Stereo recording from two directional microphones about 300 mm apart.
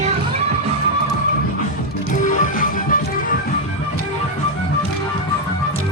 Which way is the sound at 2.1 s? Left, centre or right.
Left.